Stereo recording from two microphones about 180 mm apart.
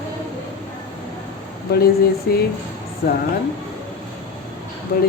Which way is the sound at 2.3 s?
55° left (ahead or behind).